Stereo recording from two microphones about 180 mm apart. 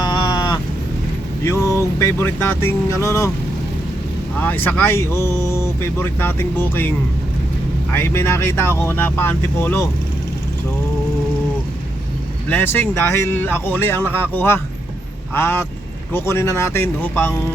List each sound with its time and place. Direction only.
0.0 s a sound: 25° left (ahead or behind)
1.5 s vehicle: 15° left (ahead or behind)
2.0 s speech: 15° left (ahead or behind)
4.4 s speech: 10° left (ahead or behind)
7.9 s speech: 15° left (ahead or behind)
12.5 s speech: 10° left (ahead or behind)